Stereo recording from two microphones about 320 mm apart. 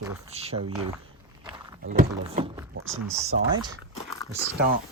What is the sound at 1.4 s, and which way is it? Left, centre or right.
Walk, centre.